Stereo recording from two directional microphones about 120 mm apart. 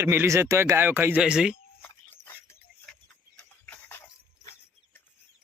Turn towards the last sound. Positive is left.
turn(degrees=15)  # may be behind; listen again after turning